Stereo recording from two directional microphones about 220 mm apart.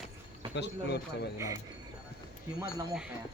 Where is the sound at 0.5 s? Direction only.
50° left (ahead or behind).